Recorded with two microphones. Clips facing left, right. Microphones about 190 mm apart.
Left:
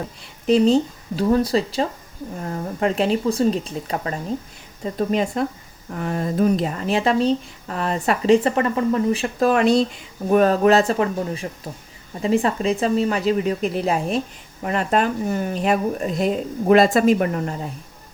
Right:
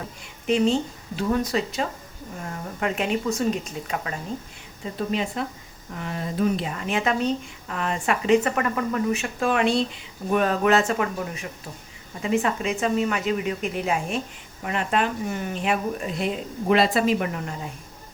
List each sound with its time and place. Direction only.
0.2 s speech: 35° left (ahead or behind)